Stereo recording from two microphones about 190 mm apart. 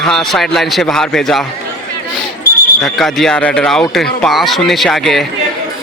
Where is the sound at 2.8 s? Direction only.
Centre (ahead or behind).